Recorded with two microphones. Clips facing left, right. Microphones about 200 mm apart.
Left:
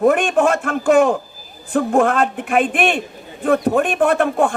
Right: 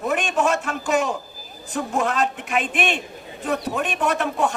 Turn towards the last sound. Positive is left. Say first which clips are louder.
# left 6 dB
turn(degrees=50)  # may be behind; listen again after turning